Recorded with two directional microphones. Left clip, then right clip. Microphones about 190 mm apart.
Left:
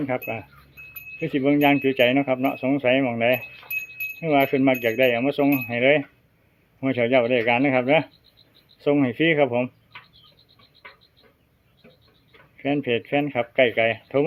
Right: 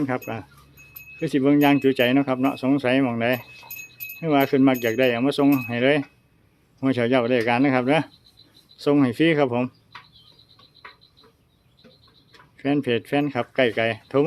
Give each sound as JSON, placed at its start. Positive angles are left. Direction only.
{"t": 0.1, "sound": "speech", "side_deg": -15}
{"t": 12.5, "sound": "speech", "side_deg": -10}